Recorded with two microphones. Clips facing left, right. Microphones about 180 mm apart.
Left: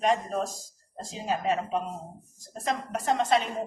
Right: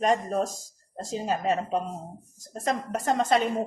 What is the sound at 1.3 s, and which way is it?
Speech, 40° right (ahead or behind).